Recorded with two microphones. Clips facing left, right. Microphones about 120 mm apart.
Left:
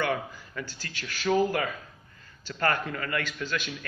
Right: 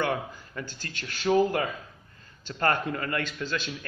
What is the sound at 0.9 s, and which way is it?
Speech, 40° right (ahead or behind).